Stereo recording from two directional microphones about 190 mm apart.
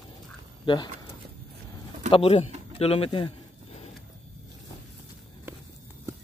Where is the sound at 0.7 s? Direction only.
25° left (ahead or behind).